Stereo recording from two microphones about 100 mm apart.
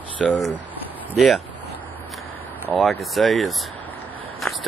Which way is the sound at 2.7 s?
Centre (ahead or behind).